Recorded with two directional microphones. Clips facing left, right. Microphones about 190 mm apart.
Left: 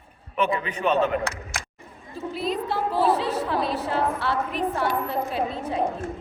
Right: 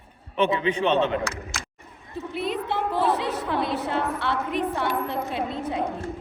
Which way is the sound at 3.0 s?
20° right (ahead or behind).